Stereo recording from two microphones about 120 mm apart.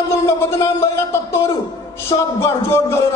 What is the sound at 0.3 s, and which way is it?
A man's voice, 20° left (ahead or behind).